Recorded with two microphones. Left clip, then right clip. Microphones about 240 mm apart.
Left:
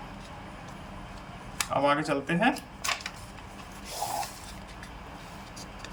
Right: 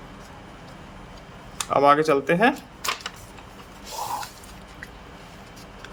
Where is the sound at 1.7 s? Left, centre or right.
Centre.